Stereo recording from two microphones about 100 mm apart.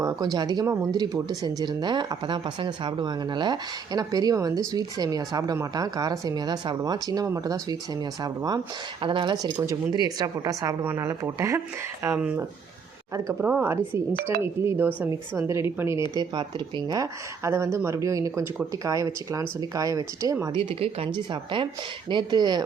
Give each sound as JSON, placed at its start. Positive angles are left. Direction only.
{"t": 0.0, "sound": "a sound", "side_deg": -35}
{"t": 0.3, "sound": "speech", "side_deg": -40}
{"t": 9.0, "sound": "speech", "side_deg": -55}
{"t": 9.4, "sound": "speech", "side_deg": -35}
{"t": 13.4, "sound": "speech", "side_deg": -20}
{"t": 16.1, "sound": "speech", "side_deg": -50}
{"t": 17.0, "sound": "speech", "side_deg": -30}
{"t": 20.5, "sound": "speech", "side_deg": -60}
{"t": 22.1, "sound": "speech", "side_deg": -45}